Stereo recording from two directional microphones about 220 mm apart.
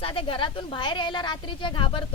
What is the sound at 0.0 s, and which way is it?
A woman's voice, 25° left (ahead or behind).